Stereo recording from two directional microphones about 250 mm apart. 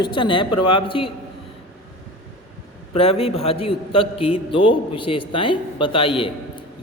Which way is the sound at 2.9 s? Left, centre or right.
Left.